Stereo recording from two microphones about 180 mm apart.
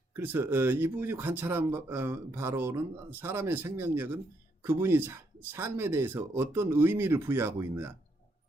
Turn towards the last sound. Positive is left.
turn(degrees=-15)  # may be behind; listen again after turning